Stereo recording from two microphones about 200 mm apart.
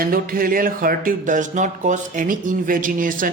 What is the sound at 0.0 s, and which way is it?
Speech, 45° right (ahead or behind).